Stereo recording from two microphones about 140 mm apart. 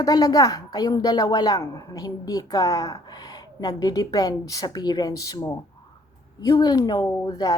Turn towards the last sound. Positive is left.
turn(degrees=30)  # may be behind; listen again after turning